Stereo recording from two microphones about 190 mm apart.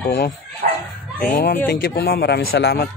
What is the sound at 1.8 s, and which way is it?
Speech, 55° left (ahead or behind).